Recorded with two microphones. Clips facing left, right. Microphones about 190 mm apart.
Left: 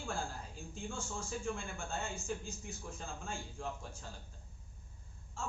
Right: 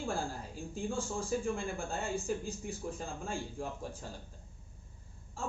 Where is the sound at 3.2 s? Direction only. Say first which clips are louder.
Right 4 dB; 35° right (ahead or behind).